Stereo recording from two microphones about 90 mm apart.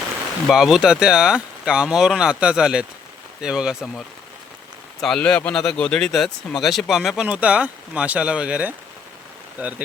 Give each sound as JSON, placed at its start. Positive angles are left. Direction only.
{"t": 0.4, "sound": "speech", "side_deg": -5}
{"t": 4.9, "sound": "a man's voice", "side_deg": 5}
{"t": 7.2, "sound": "speech", "side_deg": -15}